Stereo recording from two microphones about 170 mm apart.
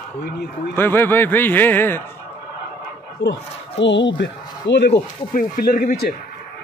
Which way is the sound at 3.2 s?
90° left.